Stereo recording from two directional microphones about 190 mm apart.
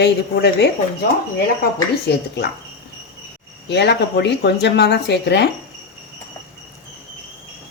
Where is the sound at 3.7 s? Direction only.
60° left (ahead or behind).